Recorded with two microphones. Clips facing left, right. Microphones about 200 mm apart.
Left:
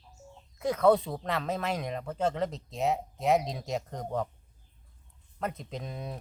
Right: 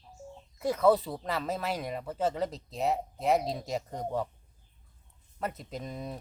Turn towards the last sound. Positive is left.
turn(degrees=0)  # may be behind; listen again after turning